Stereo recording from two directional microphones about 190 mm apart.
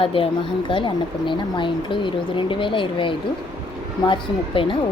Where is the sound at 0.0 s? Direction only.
30° left (ahead or behind).